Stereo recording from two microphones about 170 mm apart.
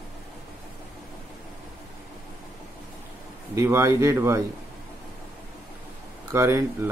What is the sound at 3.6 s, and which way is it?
Speech, 15° right (ahead or behind).